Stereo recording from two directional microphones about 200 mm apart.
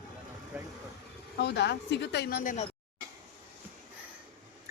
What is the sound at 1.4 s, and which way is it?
A woman's voice, 55° left (ahead or behind).